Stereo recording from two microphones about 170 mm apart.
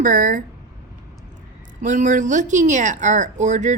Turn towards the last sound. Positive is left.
turn(degrees=-45)  # may be behind; listen again after turning